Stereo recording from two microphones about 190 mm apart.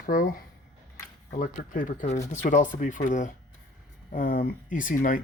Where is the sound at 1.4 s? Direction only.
45° left (ahead or behind).